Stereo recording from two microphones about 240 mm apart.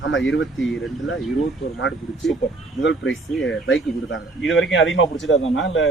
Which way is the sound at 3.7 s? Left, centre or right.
Left.